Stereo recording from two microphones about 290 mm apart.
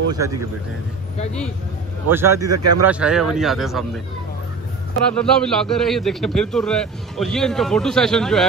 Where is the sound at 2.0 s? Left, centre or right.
Centre.